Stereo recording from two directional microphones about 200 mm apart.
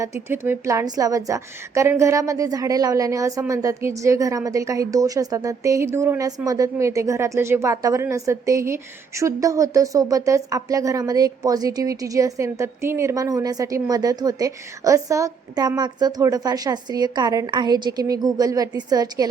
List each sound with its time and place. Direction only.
0.0 s a woman's voice: 15° right (ahead or behind)